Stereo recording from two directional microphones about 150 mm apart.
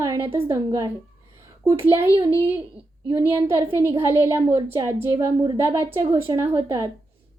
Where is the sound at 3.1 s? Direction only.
20° right (ahead or behind).